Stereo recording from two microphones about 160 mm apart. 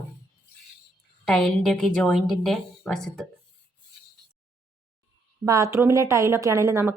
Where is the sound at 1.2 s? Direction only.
Centre (ahead or behind).